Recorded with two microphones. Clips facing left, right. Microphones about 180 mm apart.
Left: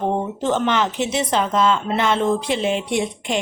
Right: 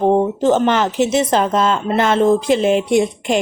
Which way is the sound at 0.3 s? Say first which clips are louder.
Right 5 dB; 45° right (ahead or behind).